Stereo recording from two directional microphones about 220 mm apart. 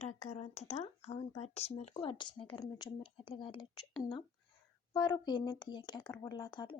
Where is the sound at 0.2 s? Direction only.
30° left (ahead or behind).